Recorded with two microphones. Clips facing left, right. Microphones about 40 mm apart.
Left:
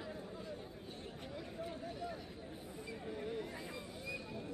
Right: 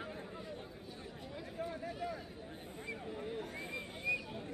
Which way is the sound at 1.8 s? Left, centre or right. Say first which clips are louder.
Right 3 dB; right.